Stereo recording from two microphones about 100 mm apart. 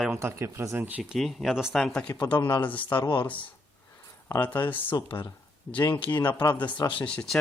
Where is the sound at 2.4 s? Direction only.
45° left (ahead or behind).